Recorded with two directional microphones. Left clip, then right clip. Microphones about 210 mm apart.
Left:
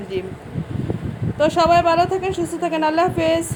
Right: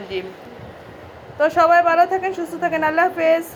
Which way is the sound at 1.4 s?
15° left (ahead or behind).